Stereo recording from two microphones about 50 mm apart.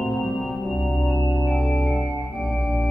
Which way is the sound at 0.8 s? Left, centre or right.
Centre.